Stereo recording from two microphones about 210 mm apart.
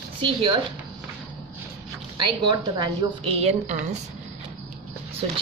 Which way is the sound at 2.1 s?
20° right (ahead or behind).